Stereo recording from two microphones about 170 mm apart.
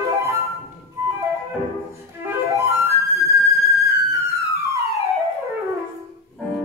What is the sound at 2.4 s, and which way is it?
Flute, 20° right (ahead or behind).